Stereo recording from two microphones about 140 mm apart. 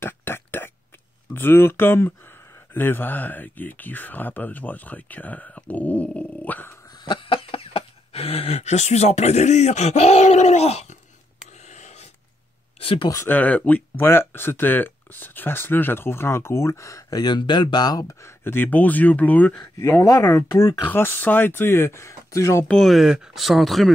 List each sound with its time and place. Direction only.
0.0 s a sound: 15° left (ahead or behind)
1.3 s speech: 15° left (ahead or behind)
7.1 s speech: 40° left (ahead or behind)
11.7 s a sound: 55° left (ahead or behind)
12.8 s speech: 40° left (ahead or behind)
13.1 s speech: 15° left (ahead or behind)
19.6 s speech: 20° left (ahead or behind)
22.7 s speech: centre (ahead or behind)